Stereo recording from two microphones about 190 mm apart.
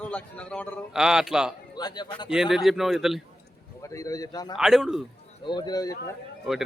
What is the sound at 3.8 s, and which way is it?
Speech, 15° left (ahead or behind).